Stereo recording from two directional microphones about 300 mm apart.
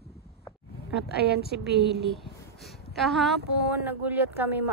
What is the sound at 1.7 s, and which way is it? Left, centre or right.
Speech, right.